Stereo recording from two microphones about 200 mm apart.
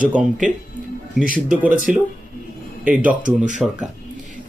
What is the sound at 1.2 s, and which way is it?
Speech, 40° right (ahead or behind).